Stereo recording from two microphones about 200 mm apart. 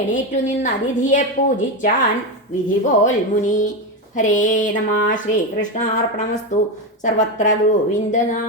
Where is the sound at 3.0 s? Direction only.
40° left (ahead or behind).